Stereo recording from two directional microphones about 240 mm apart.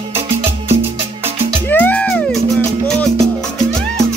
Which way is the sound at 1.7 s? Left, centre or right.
Centre.